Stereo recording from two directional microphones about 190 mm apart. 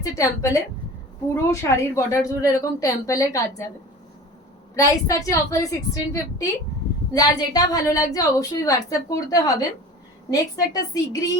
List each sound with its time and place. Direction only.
0.0 s a woman's voice: 15° left (ahead or behind)
4.7 s a woman's voice: 15° left (ahead or behind)
7.1 s a woman's voice: 20° left (ahead or behind)